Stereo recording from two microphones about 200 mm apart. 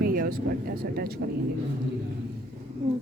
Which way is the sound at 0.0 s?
45° right (ahead or behind).